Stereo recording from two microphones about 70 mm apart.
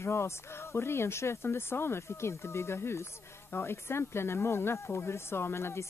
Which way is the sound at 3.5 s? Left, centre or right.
Left.